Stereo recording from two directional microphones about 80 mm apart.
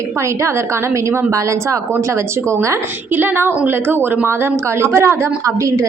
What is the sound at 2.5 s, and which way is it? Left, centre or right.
A woman's voice, right.